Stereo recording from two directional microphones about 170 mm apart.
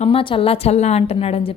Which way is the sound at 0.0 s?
30° left (ahead or behind).